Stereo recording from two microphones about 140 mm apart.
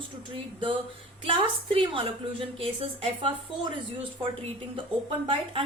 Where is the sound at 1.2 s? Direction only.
40° right (ahead or behind).